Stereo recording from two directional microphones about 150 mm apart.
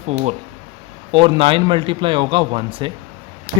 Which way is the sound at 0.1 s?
45° right (ahead or behind).